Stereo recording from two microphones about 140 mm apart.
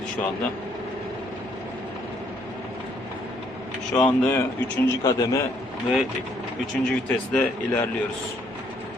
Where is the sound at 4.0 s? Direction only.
10° left (ahead or behind).